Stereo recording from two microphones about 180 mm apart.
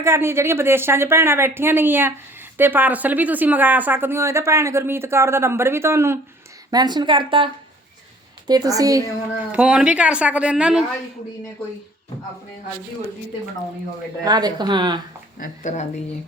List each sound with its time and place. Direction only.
0.0 s speech: 15° right (ahead or behind)
9.5 s a woman's voice: 5° right (ahead or behind)
14.3 s speech: 20° right (ahead or behind)
15.4 s speech: 40° left (ahead or behind)